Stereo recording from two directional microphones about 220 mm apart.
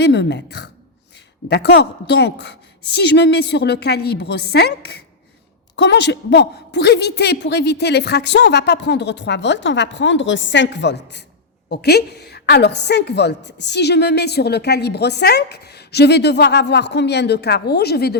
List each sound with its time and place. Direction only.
0.0 s a woman's voice: 50° left (ahead or behind)